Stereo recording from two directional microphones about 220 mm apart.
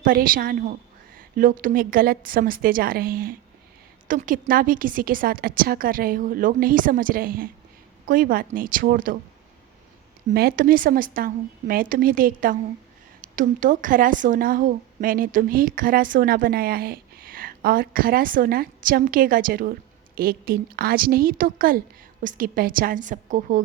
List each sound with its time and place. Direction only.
0.0 s a woman's voice: 40° right (ahead or behind)
10.2 s a woman's voice: 40° right (ahead or behind)